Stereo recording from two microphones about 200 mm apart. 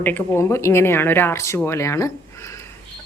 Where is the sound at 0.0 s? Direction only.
10° left (ahead or behind).